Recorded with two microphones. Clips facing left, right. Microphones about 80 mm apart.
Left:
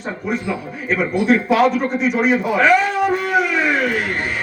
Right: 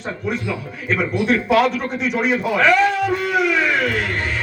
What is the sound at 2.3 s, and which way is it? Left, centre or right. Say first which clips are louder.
Speech: left 2 dB; left.